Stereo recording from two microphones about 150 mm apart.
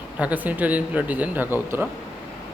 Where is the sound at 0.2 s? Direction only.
10° right (ahead or behind).